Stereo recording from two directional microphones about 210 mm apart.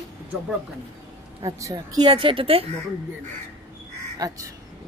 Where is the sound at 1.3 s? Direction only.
15° right (ahead or behind).